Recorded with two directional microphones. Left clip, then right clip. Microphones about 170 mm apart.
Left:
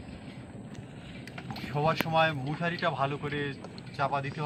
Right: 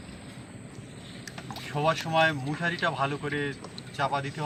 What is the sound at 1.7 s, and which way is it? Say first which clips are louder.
Speech: right 1 dB; 15° left (ahead or behind).